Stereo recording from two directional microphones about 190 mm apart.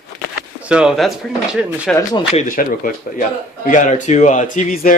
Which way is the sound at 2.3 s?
45° left (ahead or behind).